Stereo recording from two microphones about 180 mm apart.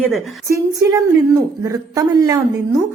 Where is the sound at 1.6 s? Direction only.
20° right (ahead or behind).